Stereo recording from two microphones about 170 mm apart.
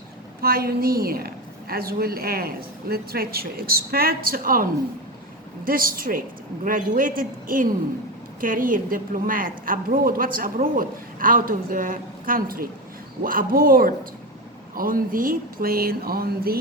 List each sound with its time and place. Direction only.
0.4 s a woman's voice: 60° right (ahead or behind)